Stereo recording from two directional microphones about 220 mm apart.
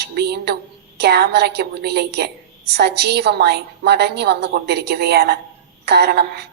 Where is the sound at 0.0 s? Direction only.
50° right (ahead or behind).